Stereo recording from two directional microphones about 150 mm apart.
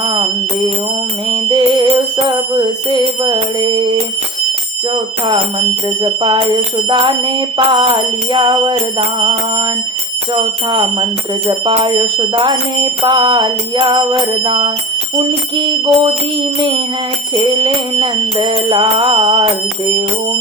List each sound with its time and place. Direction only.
0.0 s a sound: 30° right (ahead or behind)
1.3 s music: 30° right (ahead or behind)
2.1 s bell: 30° right (ahead or behind)
6.0 s bicycle bell: 35° right (ahead or behind)
10.7 s speech: 30° right (ahead or behind)
11.4 s bicycle bell: 35° right (ahead or behind)
17.3 s bicycle bell: 30° right (ahead or behind)